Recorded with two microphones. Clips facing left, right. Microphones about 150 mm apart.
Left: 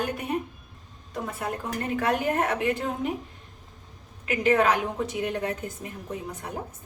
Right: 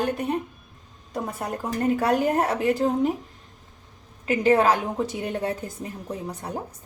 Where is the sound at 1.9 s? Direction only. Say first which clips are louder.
Right 1 dB; 35° right (ahead or behind).